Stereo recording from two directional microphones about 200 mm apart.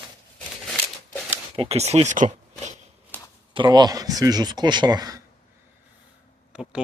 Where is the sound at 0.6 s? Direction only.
5° left (ahead or behind).